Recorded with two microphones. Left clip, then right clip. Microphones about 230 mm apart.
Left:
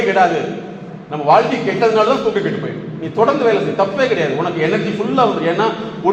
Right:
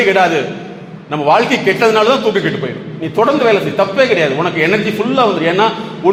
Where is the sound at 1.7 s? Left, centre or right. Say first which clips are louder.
Right 5 dB; right.